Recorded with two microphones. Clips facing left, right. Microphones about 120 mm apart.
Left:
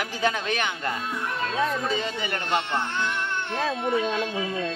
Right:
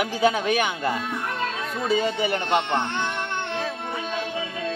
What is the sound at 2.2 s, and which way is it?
Speech, 25° right (ahead or behind).